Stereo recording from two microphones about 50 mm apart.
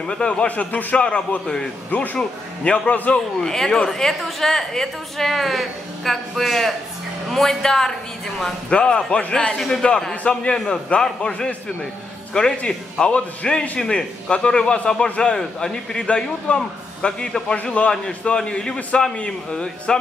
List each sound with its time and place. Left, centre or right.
0.0 s a man's voice: centre
0.5 s a man's voice: left
0.9 s a man's voice: left
3.4 s a woman's voice: centre
9.6 s a man's voice: centre